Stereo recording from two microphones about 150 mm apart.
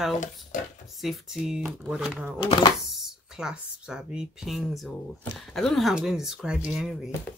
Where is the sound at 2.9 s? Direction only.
5° right (ahead or behind).